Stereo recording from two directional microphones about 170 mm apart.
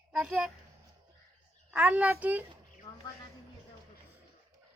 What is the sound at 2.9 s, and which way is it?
Speech, 20° left (ahead or behind).